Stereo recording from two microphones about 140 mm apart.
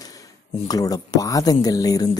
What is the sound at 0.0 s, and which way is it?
Speech, 25° left (ahead or behind).